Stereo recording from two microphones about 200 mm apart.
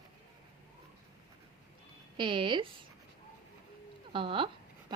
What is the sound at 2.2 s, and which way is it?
Speech, 25° right (ahead or behind).